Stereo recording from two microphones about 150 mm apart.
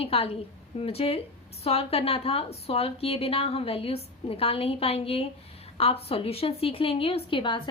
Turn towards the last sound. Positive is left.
turn(degrees=35)  # may be behind; listen again after turning